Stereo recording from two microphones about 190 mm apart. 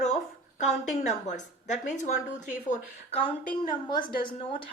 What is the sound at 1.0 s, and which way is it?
Speech, 40° left (ahead or behind).